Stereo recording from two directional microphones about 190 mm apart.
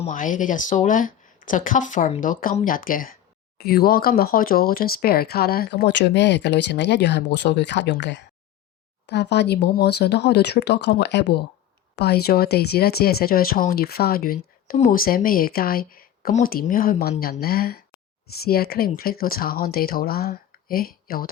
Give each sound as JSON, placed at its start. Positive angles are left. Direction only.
{"t": 0.1, "sound": "speech", "side_deg": 45}